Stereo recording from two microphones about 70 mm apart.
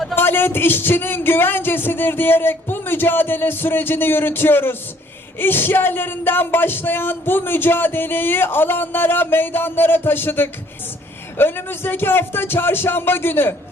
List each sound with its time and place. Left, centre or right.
0.2 s speech: left